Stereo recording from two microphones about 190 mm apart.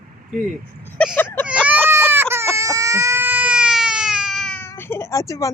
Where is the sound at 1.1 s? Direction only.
10° left (ahead or behind).